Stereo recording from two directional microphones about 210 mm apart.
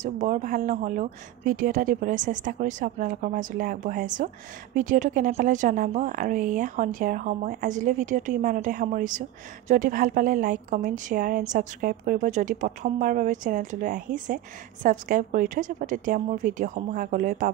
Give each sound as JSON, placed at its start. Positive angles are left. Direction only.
{"t": 0.0, "sound": "a woman's voice", "side_deg": -35}